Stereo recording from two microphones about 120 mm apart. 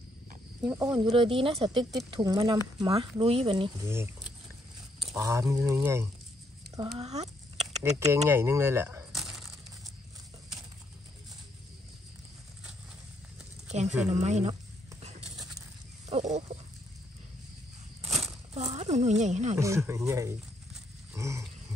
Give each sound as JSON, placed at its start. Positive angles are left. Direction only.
{"t": 0.7, "sound": "speech", "side_deg": -25}
{"t": 0.9, "sound": "speech", "side_deg": -40}
{"t": 2.9, "sound": "speech", "side_deg": -50}
{"t": 3.8, "sound": "speech", "side_deg": -20}
{"t": 5.1, "sound": "speech", "side_deg": -25}
{"t": 7.0, "sound": "a sound", "side_deg": -65}
{"t": 8.1, "sound": "speech", "side_deg": -20}
{"t": 9.1, "sound": "crushing", "side_deg": 0}
{"t": 13.7, "sound": "speech", "side_deg": -70}
{"t": 15.0, "sound": "a sound", "side_deg": -70}
{"t": 16.1, "sound": "speech", "side_deg": -85}
{"t": 18.2, "sound": "a sound", "side_deg": -65}
{"t": 19.6, "sound": "speech", "side_deg": -25}
{"t": 21.1, "sound": "a sound", "side_deg": -25}